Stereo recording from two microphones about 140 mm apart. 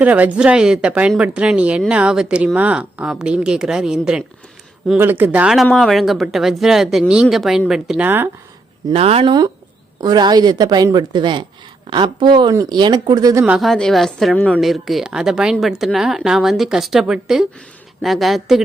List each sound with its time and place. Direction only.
0.0 s speech: 10° right (ahead or behind)
8.9 s speech: 45° right (ahead or behind)
10.0 s speech: 30° right (ahead or behind)
13.4 s speech: centre (ahead or behind)